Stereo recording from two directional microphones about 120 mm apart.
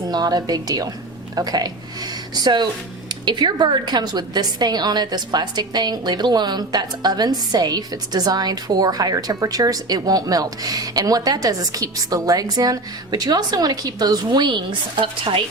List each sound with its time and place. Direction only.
0.1 s a woman's voice: 35° right (ahead or behind)